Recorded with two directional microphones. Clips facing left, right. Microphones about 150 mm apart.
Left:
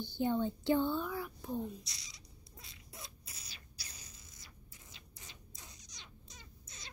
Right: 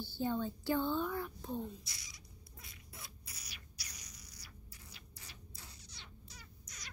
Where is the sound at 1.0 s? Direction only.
5° left (ahead or behind).